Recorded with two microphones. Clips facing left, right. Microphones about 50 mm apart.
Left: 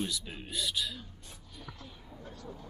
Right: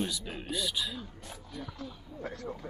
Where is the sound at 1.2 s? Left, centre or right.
Right.